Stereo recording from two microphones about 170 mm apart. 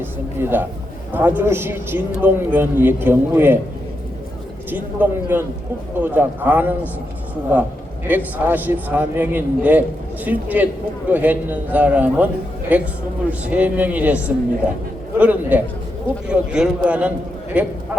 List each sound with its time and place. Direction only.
0.0 s a man's voice: 10° right (ahead or behind)
4.7 s a man's voice: 10° right (ahead or behind)